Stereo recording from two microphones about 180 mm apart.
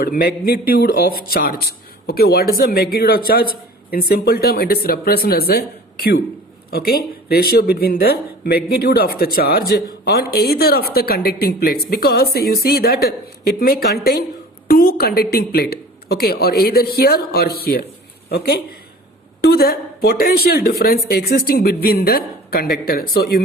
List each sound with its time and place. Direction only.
0.0 s speech: 55° left (ahead or behind)